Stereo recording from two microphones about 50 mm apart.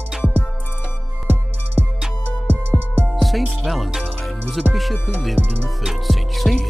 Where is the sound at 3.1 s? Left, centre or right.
Centre.